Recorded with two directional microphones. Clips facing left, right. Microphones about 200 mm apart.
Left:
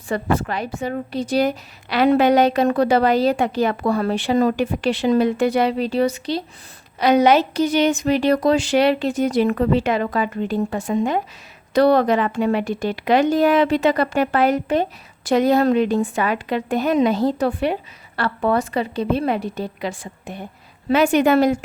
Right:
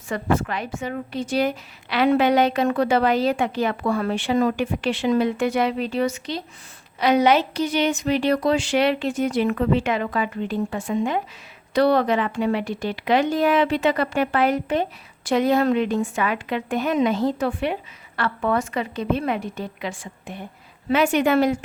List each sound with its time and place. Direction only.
0.1 s a woman's voice: 35° left (ahead or behind)